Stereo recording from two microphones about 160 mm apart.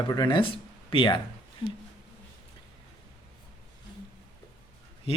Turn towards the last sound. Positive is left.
turn(degrees=40)  # may be behind; listen again after turning